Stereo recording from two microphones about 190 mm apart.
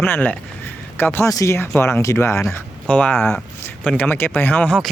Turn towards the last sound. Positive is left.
turn(degrees=10)  # may be behind; listen again after turning